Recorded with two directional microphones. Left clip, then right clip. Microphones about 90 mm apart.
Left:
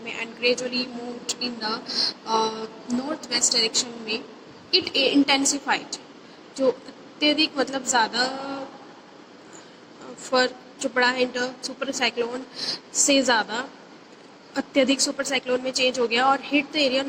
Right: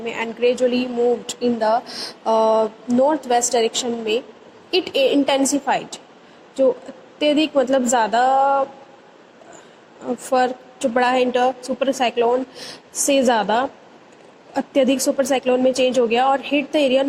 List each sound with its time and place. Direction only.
0.0 s a woman's voice: 30° right (ahead or behind)
7.2 s a woman's voice: 20° right (ahead or behind)
10.2 s a woman's voice: 25° right (ahead or behind)